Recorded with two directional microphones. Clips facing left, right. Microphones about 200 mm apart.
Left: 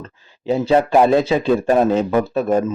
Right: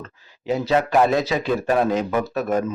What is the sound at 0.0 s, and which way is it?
Speech, 30° left (ahead or behind).